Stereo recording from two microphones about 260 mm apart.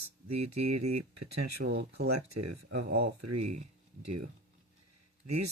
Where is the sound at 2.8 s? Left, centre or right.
Right.